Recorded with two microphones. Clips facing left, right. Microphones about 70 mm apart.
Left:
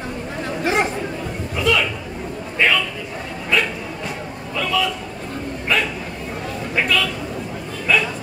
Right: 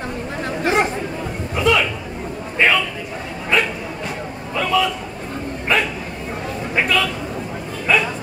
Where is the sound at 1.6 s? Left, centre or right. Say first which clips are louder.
Right 2 dB; right.